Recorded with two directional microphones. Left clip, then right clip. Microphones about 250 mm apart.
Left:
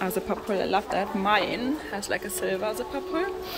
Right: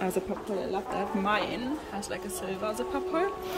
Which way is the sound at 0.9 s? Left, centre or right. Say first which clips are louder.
Left 1 dB; centre.